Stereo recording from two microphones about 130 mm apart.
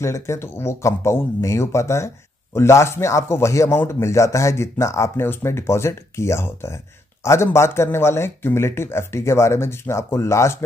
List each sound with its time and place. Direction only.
0.0 s a man's voice: 20° left (ahead or behind)